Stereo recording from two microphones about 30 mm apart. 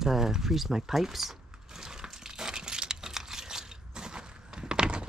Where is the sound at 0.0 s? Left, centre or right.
Centre.